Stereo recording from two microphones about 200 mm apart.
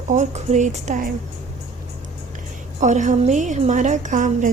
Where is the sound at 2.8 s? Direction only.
40° right (ahead or behind).